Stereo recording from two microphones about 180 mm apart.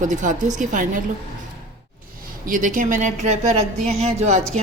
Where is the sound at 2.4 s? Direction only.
45° right (ahead or behind).